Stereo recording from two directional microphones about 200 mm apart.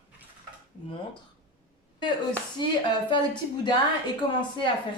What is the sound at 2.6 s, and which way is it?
Speech, 20° left (ahead or behind).